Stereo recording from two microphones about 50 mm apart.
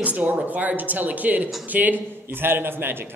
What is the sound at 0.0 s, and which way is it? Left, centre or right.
Speech, right.